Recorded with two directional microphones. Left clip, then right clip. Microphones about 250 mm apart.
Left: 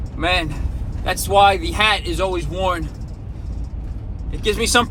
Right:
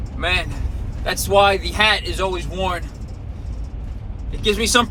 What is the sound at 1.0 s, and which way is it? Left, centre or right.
Speech, centre.